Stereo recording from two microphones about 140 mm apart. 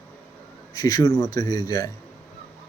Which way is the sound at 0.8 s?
30° left (ahead or behind).